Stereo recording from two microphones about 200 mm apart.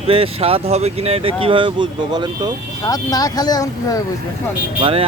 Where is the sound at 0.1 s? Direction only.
30° right (ahead or behind).